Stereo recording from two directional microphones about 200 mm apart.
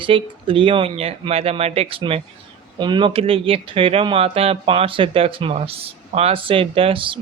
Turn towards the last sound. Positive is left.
turn(degrees=-25)  # may be behind; listen again after turning